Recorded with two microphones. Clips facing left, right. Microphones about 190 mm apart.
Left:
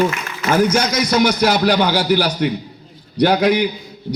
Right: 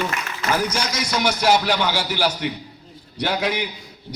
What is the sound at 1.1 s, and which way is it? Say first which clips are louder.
Speech: left 2 dB; 40° left (ahead or behind).